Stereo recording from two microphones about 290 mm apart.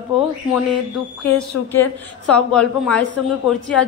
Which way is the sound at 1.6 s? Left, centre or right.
Left.